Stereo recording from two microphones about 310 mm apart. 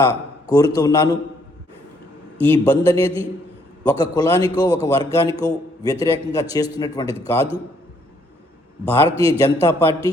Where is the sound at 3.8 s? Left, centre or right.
Centre.